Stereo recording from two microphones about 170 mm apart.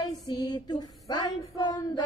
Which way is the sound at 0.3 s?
25° left (ahead or behind).